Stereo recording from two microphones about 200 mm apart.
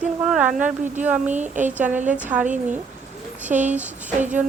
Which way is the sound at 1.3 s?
35° right (ahead or behind).